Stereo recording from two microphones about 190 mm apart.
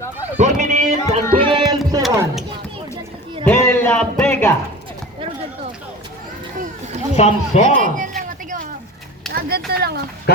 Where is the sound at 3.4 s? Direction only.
15° left (ahead or behind).